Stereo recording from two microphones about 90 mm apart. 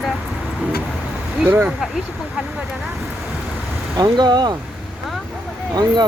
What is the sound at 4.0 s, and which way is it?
Speech, 50° right (ahead or behind).